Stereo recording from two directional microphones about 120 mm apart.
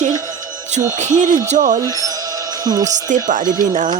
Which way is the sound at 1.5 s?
80° right.